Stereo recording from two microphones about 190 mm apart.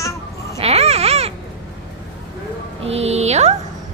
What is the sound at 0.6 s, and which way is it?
Babbling, 35° right (ahead or behind).